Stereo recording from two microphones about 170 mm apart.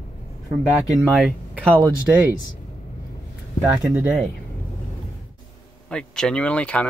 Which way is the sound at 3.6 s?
15° right (ahead or behind).